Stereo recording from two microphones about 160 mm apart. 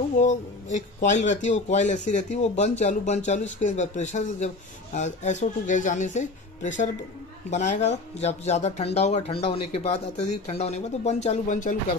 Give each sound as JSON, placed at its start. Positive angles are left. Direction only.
{"t": 0.2, "sound": "speech", "side_deg": 50}